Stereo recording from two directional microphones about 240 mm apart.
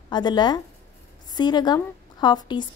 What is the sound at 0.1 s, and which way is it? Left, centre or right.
A woman's voice, centre.